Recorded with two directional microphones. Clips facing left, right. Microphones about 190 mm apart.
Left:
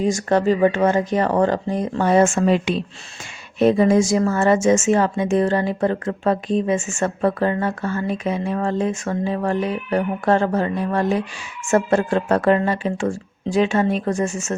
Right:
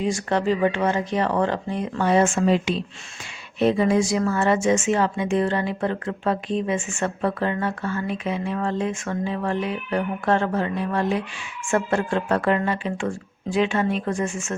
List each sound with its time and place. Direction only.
0.0 s speech: 45° left (ahead or behind)
3.6 s a woman's voice: 45° left (ahead or behind)